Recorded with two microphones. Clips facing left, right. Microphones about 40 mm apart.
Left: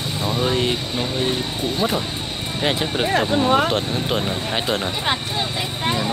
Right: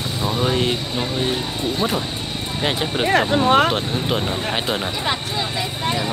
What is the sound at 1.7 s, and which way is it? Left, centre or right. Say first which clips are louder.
Speech: left 2 dB; centre.